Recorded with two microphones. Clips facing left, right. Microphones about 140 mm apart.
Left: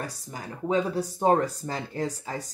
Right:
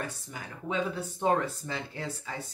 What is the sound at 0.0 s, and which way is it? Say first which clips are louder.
Speech: left 2 dB; 35° left (ahead or behind).